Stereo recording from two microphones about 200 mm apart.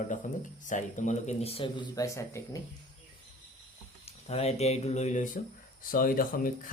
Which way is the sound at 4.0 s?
30° left (ahead or behind).